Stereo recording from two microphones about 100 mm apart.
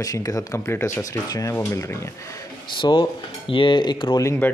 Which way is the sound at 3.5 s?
55° left (ahead or behind).